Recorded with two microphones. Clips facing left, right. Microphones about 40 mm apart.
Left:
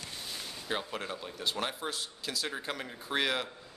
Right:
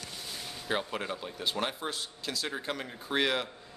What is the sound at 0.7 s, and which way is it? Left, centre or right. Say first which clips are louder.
A man's voice: right 3 dB; centre.